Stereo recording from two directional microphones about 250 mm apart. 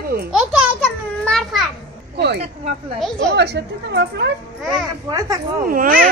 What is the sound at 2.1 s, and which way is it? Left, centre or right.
Speech, right.